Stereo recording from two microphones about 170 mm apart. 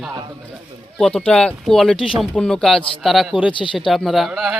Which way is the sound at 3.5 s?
30° left (ahead or behind).